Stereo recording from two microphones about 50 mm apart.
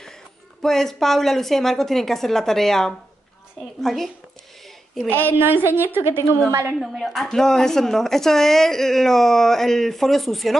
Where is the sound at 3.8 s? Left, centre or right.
Centre.